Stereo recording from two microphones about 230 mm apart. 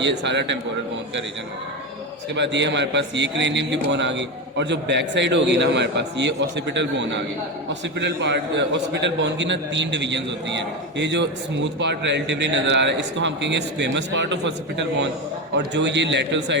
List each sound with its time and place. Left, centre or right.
0.0 s a man's voice: right
2.3 s a man's voice: right